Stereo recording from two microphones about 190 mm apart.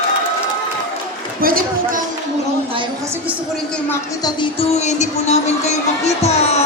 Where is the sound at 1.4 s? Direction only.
50° right (ahead or behind).